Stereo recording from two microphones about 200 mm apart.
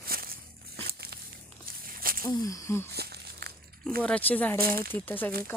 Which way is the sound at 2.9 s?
55° right (ahead or behind).